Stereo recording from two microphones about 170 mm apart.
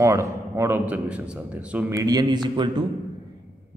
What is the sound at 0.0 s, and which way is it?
A man's voice, 20° right (ahead or behind).